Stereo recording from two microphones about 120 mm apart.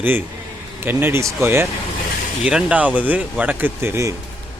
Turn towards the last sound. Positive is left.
turn(degrees=-20)  # may be behind; listen again after turning